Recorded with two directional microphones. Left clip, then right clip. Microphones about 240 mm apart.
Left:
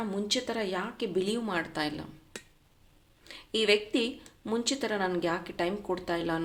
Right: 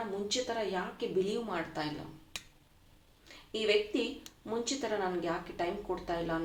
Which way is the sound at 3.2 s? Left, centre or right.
Left.